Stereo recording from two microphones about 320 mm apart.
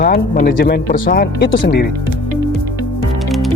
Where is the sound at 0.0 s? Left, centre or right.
Left.